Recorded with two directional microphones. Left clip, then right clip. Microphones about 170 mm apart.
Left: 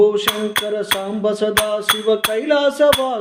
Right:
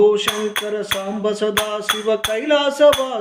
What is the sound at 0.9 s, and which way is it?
Music, 45° left (ahead or behind).